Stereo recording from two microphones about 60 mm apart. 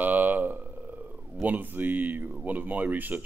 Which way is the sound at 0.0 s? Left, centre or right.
Right.